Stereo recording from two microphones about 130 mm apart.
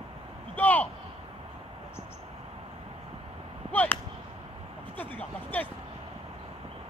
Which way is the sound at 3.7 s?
10° left (ahead or behind).